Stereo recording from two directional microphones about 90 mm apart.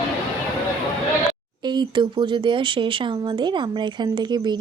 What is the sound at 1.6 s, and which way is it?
Speech, 55° right (ahead or behind).